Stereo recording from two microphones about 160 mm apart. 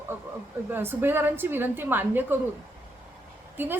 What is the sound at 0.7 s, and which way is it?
A woman's voice, 15° right (ahead or behind).